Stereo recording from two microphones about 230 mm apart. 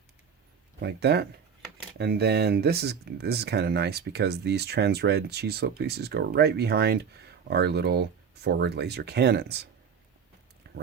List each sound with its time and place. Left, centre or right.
0.8 s speech: right